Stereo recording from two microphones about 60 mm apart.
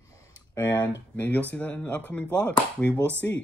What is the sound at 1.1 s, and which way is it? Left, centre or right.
Speech, left.